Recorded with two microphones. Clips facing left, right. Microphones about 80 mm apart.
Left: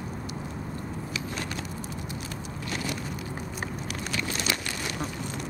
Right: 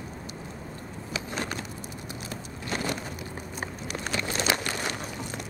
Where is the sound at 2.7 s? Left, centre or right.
Right.